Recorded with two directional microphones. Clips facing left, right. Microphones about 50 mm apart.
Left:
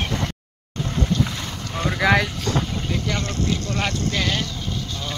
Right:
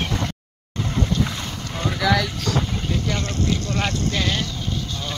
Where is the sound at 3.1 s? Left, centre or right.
Centre.